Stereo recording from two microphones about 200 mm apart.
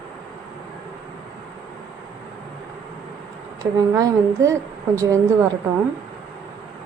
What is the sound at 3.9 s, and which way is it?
A woman's voice, 15° right (ahead or behind).